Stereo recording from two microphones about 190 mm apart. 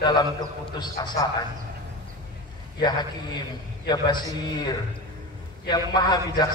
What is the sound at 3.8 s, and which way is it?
A man's voice, 20° left (ahead or behind).